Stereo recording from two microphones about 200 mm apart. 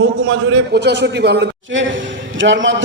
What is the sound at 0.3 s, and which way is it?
A man's voice, 75° right (ahead or behind).